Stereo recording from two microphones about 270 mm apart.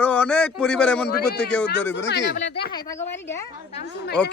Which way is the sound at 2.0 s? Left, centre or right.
Left.